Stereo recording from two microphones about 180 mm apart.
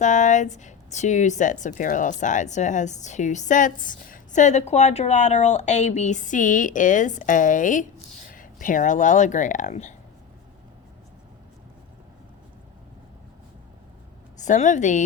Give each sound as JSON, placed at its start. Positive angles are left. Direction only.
{"t": 0.0, "sound": "speech", "side_deg": 45}
{"t": 14.3, "sound": "speech", "side_deg": 40}